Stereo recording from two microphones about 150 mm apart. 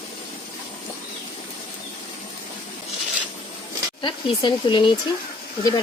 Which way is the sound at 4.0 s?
30° left (ahead or behind).